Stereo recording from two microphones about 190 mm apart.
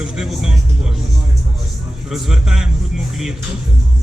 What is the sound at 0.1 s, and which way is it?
Music, centre (ahead or behind).